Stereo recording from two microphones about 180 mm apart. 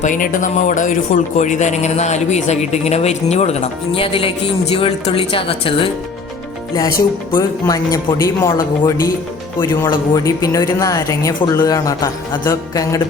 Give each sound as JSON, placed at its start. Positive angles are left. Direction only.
{"t": 0.0, "sound": "speech", "side_deg": 45}
{"t": 7.3, "sound": "speech", "side_deg": 20}